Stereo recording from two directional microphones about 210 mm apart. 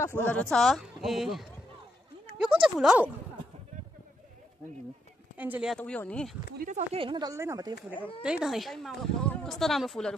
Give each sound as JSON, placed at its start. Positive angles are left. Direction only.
{"t": 0.0, "sound": "speech", "side_deg": 10}
{"t": 2.6, "sound": "speech", "side_deg": -5}
{"t": 5.4, "sound": "speech", "side_deg": -5}
{"t": 5.8, "sound": "speech", "side_deg": 5}
{"t": 6.6, "sound": "speech", "side_deg": -30}
{"t": 8.2, "sound": "speech", "side_deg": -5}